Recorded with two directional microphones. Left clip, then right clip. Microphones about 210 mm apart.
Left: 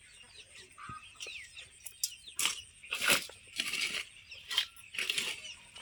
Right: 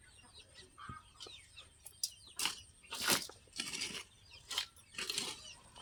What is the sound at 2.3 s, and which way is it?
Crushing, 20° right (ahead or behind).